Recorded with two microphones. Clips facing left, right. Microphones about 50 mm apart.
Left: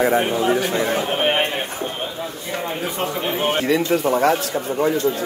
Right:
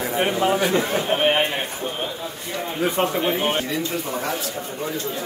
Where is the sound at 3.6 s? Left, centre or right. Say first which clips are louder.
Left 8 dB; left.